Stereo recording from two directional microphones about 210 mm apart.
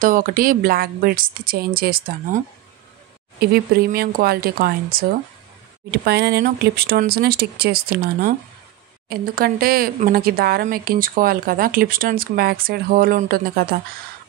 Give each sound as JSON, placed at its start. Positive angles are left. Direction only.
{"t": 0.0, "sound": "speech", "side_deg": -40}
{"t": 3.3, "sound": "speech", "side_deg": -45}